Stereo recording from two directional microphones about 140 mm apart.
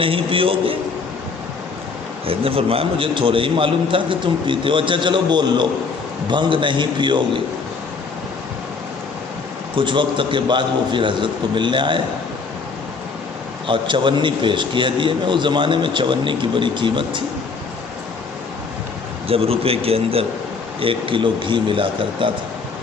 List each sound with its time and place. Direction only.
0.0 s a man's voice: 40° right (ahead or behind)
2.2 s a man's voice: 40° right (ahead or behind)
9.7 s a man's voice: 35° right (ahead or behind)
13.7 s a man's voice: 35° right (ahead or behind)
19.3 s a man's voice: 45° right (ahead or behind)